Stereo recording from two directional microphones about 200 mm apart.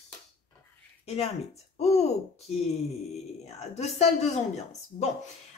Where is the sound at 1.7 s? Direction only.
30° left (ahead or behind).